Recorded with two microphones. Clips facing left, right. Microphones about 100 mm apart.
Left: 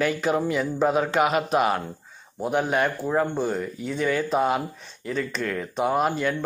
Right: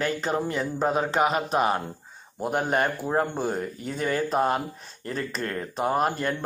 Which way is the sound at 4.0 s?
40° right (ahead or behind).